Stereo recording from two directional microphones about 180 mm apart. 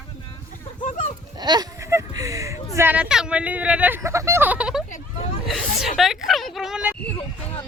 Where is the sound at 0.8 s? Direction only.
45° left (ahead or behind).